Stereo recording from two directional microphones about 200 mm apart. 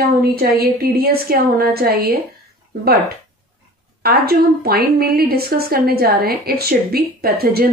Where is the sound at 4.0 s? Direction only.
50° right (ahead or behind).